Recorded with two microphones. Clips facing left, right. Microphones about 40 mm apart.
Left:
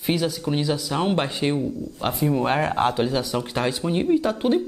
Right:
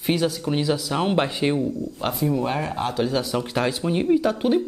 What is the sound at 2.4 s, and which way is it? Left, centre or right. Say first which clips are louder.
Speech: left 4 dB; left.